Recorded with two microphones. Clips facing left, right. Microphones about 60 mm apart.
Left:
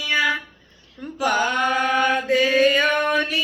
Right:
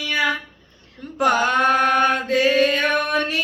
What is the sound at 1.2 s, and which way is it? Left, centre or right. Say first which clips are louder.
Mantra: right 3 dB; right.